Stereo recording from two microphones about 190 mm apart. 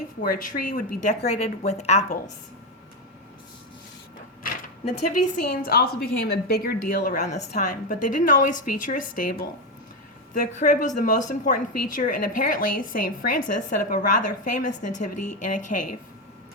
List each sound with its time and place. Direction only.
0.2 s a woman's voice: 45° left (ahead or behind)
5.2 s a woman's voice: 45° left (ahead or behind)